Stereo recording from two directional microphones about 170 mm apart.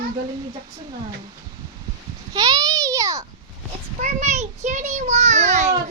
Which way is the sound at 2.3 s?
20° right (ahead or behind).